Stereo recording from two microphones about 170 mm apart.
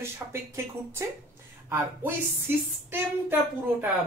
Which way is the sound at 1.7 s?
15° right (ahead or behind).